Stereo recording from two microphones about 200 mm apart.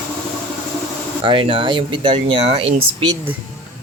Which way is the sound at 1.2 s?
25° right (ahead or behind).